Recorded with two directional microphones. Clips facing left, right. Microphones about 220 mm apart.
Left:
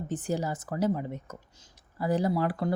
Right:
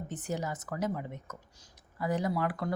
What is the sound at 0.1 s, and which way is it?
Speech, 30° left (ahead or behind).